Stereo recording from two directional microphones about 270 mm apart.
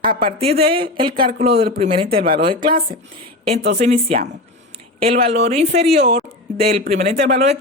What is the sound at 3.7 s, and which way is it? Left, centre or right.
Speech, right.